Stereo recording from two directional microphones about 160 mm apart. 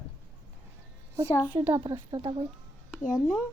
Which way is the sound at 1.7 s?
30° right (ahead or behind).